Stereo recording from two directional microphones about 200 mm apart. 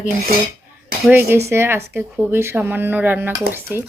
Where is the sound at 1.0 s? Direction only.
10° right (ahead or behind).